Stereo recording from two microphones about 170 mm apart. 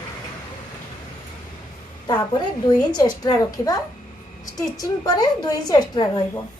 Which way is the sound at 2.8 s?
25° left (ahead or behind).